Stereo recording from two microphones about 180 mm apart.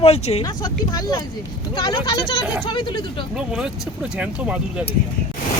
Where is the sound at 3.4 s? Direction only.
5° right (ahead or behind).